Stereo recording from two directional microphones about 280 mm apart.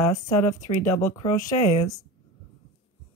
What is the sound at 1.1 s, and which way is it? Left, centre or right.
Speech, centre.